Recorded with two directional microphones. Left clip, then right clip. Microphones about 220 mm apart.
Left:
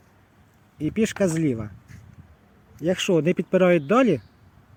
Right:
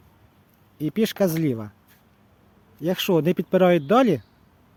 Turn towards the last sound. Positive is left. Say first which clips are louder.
# right 1 dB
turn(degrees=-15)  # may be behind; listen again after turning